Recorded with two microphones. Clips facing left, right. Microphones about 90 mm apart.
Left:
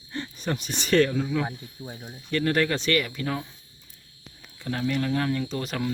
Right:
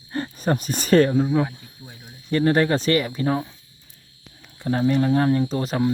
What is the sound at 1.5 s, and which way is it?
Speech, 25° left (ahead or behind).